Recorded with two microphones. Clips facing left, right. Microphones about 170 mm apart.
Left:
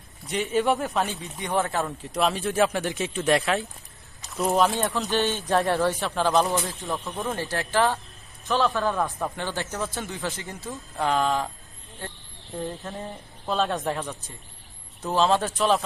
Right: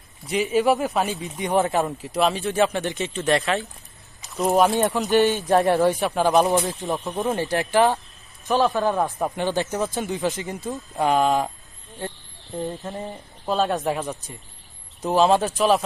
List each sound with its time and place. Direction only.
0.3 s speech: 5° right (ahead or behind)
1.2 s speech: 15° right (ahead or behind)
2.1 s speech: centre (ahead or behind)
4.2 s a sound: centre (ahead or behind)
4.5 s speech: 15° right (ahead or behind)
12.5 s speech: 20° right (ahead or behind)
13.5 s speech: 5° right (ahead or behind)